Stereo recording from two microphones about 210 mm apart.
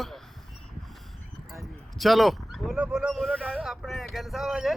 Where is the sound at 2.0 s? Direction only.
Centre (ahead or behind).